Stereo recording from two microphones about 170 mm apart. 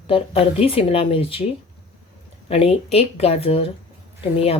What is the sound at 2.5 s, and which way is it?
A woman's voice, 35° left (ahead or behind).